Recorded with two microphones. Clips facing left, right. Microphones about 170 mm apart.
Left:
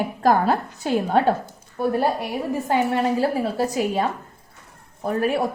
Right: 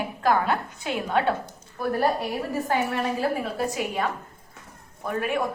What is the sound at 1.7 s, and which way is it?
A woman's voice, 25° left (ahead or behind).